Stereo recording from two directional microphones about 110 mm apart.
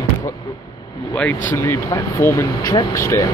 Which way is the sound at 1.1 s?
15° left (ahead or behind).